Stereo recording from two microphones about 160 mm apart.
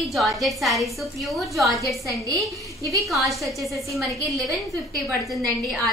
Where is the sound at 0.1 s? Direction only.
Centre (ahead or behind).